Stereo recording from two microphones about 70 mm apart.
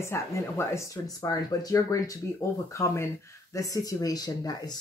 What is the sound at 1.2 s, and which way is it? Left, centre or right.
Speech, left.